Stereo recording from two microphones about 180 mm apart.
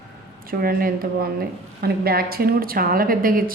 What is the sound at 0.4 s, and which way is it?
A woman's voice, 55° right (ahead or behind).